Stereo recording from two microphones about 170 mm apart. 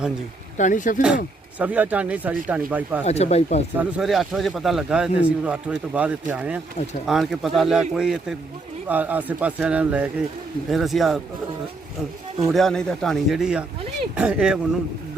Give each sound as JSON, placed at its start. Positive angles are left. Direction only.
{"t": 0.5, "sound": "speech", "side_deg": 45}
{"t": 1.5, "sound": "speech", "side_deg": -10}
{"t": 3.1, "sound": "speech", "side_deg": 40}
{"t": 3.8, "sound": "speech", "side_deg": -5}
{"t": 12.5, "sound": "speech", "side_deg": 0}